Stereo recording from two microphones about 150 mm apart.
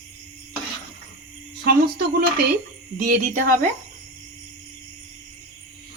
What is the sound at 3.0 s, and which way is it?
Speech, 65° right (ahead or behind).